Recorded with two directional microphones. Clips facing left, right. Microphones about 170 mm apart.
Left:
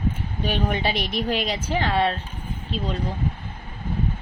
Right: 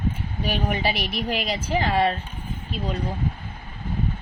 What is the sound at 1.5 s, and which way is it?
Speech, 10° right (ahead or behind).